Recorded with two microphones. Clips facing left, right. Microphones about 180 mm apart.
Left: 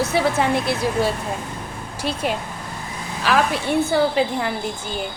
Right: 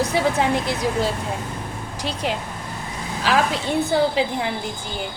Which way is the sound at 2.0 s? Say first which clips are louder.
Left 3 dB; 20° right (ahead or behind).